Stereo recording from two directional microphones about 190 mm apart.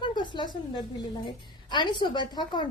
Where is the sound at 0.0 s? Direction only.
25° left (ahead or behind).